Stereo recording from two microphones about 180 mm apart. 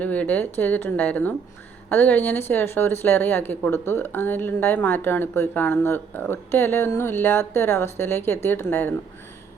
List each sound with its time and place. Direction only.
0.0 s speech: 10° left (ahead or behind)